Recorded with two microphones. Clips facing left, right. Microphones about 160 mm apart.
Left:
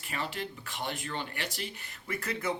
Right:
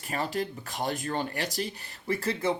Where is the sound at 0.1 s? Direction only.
40° right (ahead or behind).